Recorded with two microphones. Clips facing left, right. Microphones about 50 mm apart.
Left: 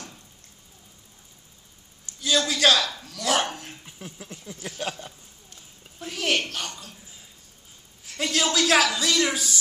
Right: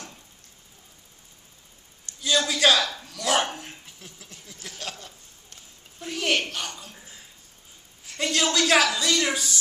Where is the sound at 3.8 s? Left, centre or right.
Centre.